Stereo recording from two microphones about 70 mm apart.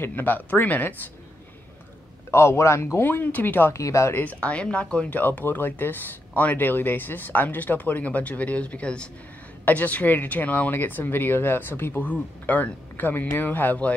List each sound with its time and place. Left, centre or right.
0.0 s speech: left
2.3 s a man's voice: left
3.0 s speech: left
3.7 s speech: left
4.2 s speech: centre